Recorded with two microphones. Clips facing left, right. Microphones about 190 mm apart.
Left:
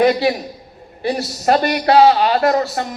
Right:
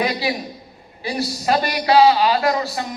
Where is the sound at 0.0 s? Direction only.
45° left (ahead or behind).